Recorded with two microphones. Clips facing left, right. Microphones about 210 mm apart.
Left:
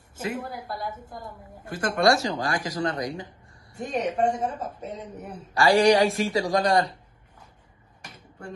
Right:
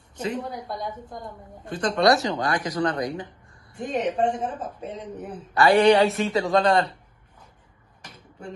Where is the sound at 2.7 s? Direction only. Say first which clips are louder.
Right 4 dB; 25° left (ahead or behind).